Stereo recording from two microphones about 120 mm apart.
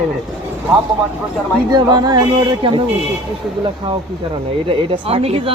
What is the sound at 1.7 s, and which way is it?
Speech, 35° right (ahead or behind).